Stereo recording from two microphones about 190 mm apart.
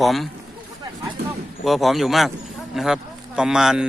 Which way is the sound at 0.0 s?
Centre (ahead or behind).